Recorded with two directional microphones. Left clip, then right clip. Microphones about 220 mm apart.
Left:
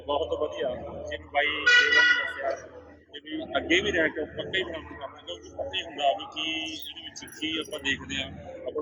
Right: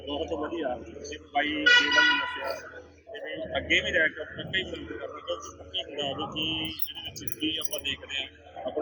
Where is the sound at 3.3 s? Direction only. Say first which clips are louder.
Left 1 dB; 20° left (ahead or behind).